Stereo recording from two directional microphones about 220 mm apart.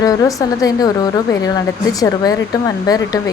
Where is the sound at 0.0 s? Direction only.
15° left (ahead or behind).